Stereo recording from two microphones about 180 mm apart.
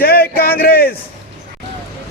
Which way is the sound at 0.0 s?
60° left (ahead or behind).